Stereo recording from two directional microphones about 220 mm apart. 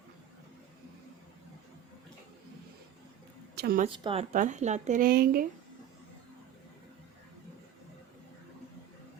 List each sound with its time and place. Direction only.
3.5 s a woman's voice: 45° right (ahead or behind)
3.8 s speech: 25° right (ahead or behind); by 5.5 s 45° right (ahead or behind)